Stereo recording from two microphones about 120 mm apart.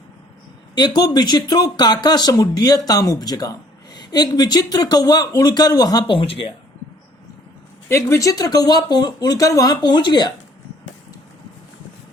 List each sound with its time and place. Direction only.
0.8 s speech: 35° left (ahead or behind)
7.9 s speech: 20° left (ahead or behind); by 10.3 s 35° left (ahead or behind)